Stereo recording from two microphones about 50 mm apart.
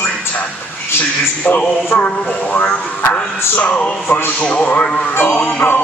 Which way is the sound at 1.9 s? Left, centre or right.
Left.